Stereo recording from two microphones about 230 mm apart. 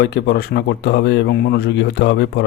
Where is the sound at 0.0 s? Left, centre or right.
Left.